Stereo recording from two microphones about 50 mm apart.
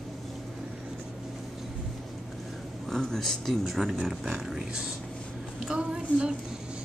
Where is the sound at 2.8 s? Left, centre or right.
Centre.